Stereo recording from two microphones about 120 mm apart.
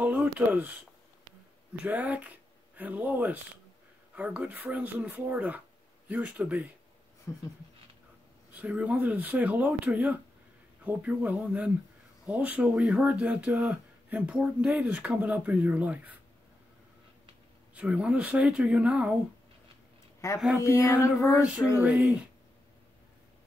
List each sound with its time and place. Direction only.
0.0 s a sound: 15° right (ahead or behind)
1.9 s speech: 15° right (ahead or behind)
7.3 s female singing: 20° left (ahead or behind)
8.5 s speech: 10° right (ahead or behind)
17.7 s speech: 10° right (ahead or behind)
20.2 s female singing: 25° left (ahead or behind)
20.5 s music: 20° right (ahead or behind)
21.0 s female singing: 25° left (ahead or behind)
21.4 s speech: 10° right (ahead or behind)